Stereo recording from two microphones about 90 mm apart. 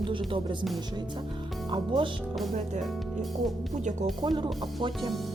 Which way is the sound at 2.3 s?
Centre (ahead or behind).